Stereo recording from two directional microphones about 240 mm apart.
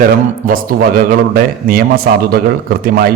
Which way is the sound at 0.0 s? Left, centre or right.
Right.